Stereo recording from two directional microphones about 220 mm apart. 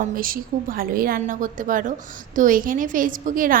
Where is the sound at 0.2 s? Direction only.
40° right (ahead or behind).